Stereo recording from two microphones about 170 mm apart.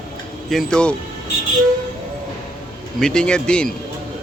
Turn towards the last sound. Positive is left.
turn(degrees=5)  # may be behind; listen again after turning